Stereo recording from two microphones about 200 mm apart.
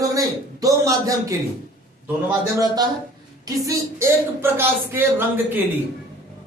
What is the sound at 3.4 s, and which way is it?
Speech, 15° right (ahead or behind).